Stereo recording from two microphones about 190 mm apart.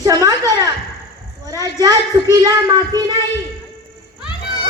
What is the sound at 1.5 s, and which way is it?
A woman's voice, 20° right (ahead or behind).